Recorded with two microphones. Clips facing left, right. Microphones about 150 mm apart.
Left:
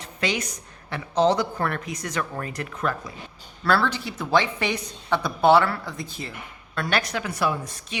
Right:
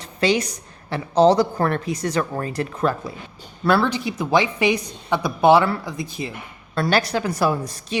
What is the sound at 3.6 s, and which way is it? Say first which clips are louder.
Speech: right 4 dB; 20° right (ahead or behind).